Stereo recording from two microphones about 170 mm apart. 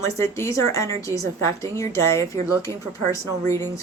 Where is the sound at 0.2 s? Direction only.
15° left (ahead or behind).